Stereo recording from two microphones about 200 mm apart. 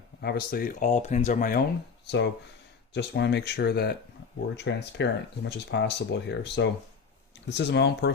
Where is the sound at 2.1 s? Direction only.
60° left (ahead or behind).